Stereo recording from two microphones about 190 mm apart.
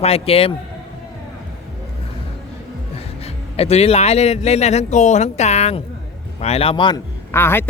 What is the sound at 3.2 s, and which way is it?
A man's voice, 35° left (ahead or behind).